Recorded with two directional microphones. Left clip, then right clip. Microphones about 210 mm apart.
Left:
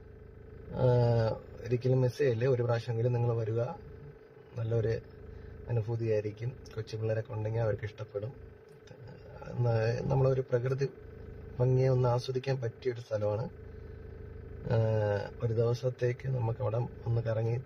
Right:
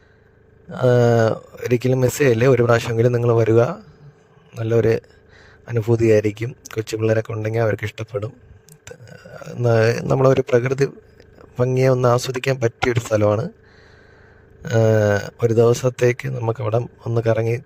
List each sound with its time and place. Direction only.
0.7 s speech: 55° right (ahead or behind)
9.6 s speech: 55° right (ahead or behind)
14.8 s speech: 60° right (ahead or behind)